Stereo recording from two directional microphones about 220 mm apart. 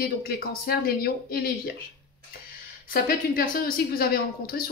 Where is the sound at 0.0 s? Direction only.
45° left (ahead or behind).